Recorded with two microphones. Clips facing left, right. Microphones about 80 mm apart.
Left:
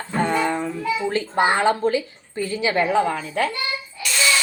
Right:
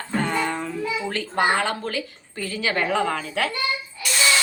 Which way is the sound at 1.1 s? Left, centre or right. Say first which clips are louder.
Left 1 dB; left.